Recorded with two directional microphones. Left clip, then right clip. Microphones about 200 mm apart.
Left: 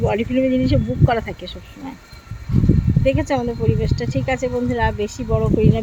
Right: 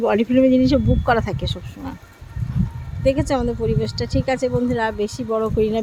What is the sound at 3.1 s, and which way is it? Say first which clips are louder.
Speech: right 1 dB; 15° right (ahead or behind).